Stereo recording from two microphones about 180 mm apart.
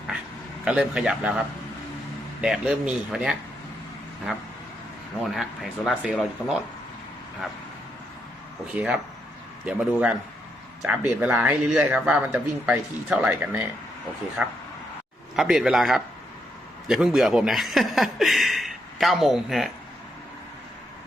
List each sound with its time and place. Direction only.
0.6 s speech: 5° right (ahead or behind)
2.4 s speech: 5° right (ahead or behind)
5.2 s speech: centre (ahead or behind)
8.7 s speech: 5° right (ahead or behind)